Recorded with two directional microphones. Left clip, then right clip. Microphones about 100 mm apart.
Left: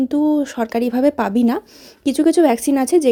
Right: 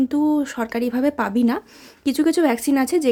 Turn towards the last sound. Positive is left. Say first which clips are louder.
# left 4 dB
turn(degrees=30)  # may be behind; listen again after turning